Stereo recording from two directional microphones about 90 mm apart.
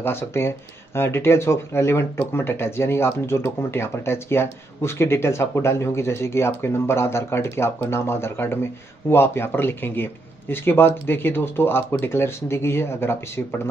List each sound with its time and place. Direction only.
0.0 s speech: 25° left (ahead or behind)